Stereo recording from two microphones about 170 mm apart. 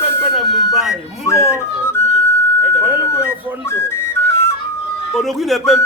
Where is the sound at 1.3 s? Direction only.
15° left (ahead or behind).